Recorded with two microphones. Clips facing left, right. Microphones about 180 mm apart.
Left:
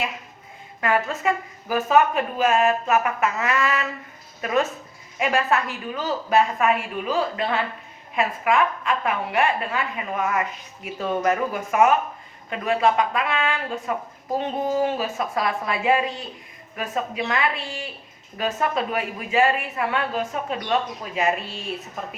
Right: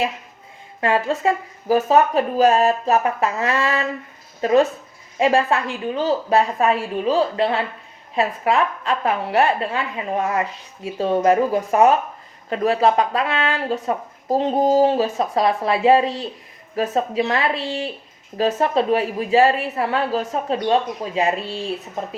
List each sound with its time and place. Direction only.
0.8 s speech: 30° right (ahead or behind)